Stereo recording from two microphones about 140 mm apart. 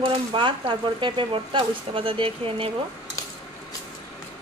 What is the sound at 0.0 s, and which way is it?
Speech, 40° right (ahead or behind).